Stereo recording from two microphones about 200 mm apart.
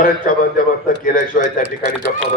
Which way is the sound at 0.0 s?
45° left (ahead or behind).